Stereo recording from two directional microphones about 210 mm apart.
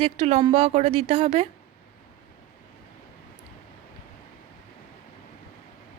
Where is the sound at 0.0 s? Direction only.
30° right (ahead or behind).